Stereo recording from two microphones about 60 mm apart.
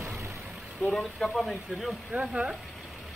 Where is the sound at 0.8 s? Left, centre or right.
Centre.